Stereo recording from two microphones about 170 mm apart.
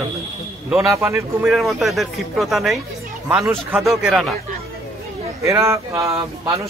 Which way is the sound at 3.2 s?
15° right (ahead or behind).